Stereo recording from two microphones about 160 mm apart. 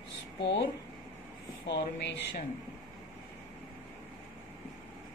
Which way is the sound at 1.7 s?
90° left.